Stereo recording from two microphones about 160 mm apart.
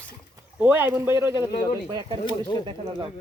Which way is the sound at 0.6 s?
10° right (ahead or behind).